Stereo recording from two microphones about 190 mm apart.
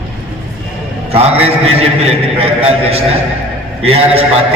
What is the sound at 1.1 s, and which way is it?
A man's voice, 30° right (ahead or behind).